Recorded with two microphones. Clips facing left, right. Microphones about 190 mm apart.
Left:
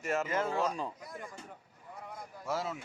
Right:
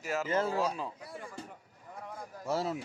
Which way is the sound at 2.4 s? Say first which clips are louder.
Right 3 dB; 30° right (ahead or behind).